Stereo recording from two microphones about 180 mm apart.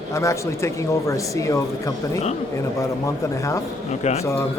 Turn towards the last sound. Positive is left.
turn(degrees=35)  # may be behind; listen again after turning